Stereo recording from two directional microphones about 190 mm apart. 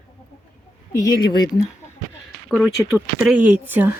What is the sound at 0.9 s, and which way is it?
Speech, 15° left (ahead or behind).